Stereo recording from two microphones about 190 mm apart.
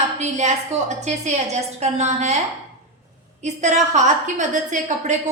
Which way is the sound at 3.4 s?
40° right (ahead or behind).